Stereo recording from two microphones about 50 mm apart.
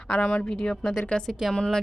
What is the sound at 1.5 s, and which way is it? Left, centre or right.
Speech, centre.